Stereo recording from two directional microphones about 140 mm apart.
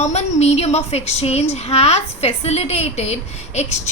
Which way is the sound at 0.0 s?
55° left (ahead or behind).